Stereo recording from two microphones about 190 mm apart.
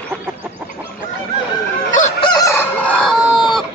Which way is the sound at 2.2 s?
20° left (ahead or behind).